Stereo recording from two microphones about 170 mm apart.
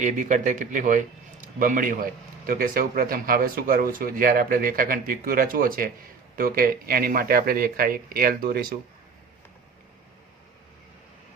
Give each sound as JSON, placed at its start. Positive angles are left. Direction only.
{"t": 0.0, "sound": "a man's voice", "side_deg": -45}